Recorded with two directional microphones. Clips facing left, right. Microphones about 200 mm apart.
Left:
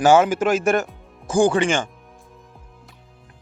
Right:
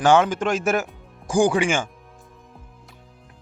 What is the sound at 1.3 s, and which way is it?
Speech, 15° right (ahead or behind).